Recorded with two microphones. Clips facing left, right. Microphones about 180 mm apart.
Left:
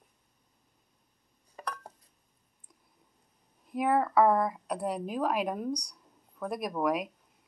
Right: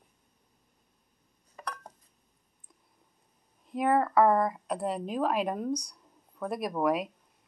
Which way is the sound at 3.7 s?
5° left (ahead or behind).